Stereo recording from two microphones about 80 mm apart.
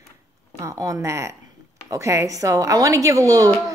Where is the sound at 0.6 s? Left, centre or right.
Right.